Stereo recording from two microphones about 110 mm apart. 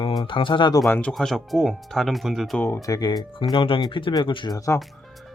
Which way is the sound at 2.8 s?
35° left (ahead or behind).